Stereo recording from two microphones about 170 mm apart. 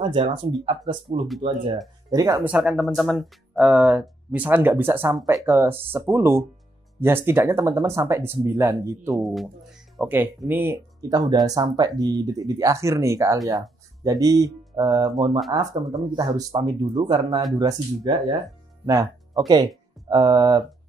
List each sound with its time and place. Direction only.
0.0 s speech: 30° right (ahead or behind)
2.0 s speech: 20° right (ahead or behind)
2.4 s speech: 5° right (ahead or behind)
9.1 s speech: centre (ahead or behind)
9.9 s speech: 10° right (ahead or behind)